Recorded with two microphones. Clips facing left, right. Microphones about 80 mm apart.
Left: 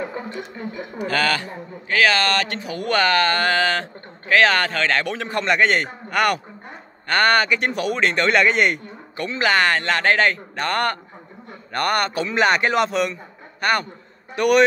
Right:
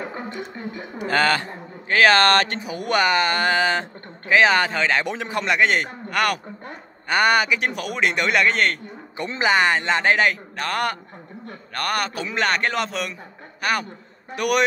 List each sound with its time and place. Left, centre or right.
1.0 s a man's voice: right
2.6 s a man's voice: centre
7.1 s a man's voice: centre
9.4 s a man's voice: centre